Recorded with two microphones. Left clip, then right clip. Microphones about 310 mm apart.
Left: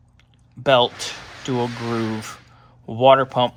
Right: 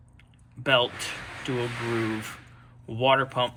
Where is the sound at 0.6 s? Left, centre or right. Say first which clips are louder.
Left 7 dB; left.